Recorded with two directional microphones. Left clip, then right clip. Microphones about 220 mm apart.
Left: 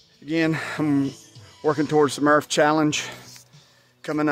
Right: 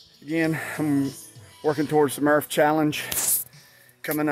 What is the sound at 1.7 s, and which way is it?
A man's voice, 10° left (ahead or behind).